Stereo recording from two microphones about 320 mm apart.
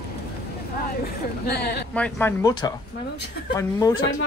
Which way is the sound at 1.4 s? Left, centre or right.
Left.